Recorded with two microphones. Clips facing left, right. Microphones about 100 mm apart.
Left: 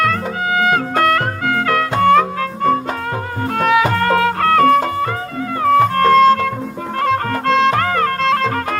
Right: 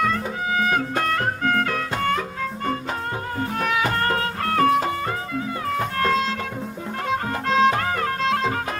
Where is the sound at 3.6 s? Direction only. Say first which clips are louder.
Left 9 dB; 90° left.